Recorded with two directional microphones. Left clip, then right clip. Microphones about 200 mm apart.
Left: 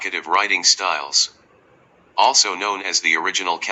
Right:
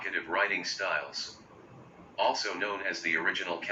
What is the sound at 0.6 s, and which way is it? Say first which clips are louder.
A man's voice: left 13 dB; 60° left (ahead or behind).